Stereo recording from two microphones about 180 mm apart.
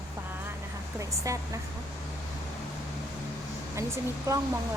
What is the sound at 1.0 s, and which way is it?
Speech, 15° right (ahead or behind).